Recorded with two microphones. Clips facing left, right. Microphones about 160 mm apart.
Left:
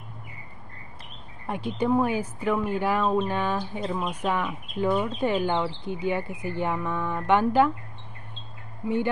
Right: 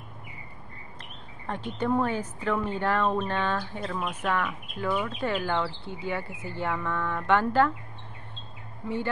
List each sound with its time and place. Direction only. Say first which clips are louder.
1.5 s speech: left 3 dB; 10° left (ahead or behind)
8.8 s speech: left 5 dB; 15° left (ahead or behind)